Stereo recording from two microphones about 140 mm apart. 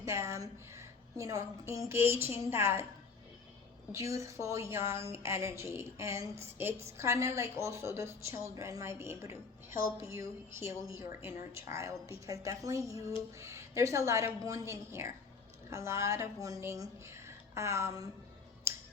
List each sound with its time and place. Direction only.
0.0 s a woman's voice: 20° right (ahead or behind)
3.9 s a woman's voice: 20° right (ahead or behind)
18.7 s music: 20° right (ahead or behind)